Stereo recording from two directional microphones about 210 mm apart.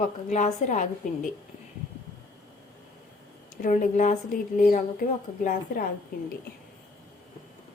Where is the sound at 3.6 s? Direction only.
40° left (ahead or behind).